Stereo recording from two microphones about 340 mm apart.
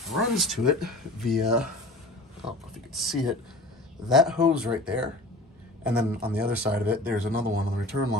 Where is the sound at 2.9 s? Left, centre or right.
Centre.